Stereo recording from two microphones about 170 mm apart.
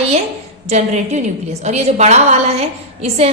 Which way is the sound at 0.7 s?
40° right (ahead or behind).